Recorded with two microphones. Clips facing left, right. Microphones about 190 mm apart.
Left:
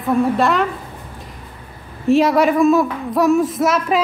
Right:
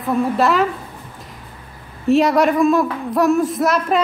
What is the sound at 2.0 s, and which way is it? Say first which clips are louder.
A woman's voice: left 1 dB; centre (ahead or behind).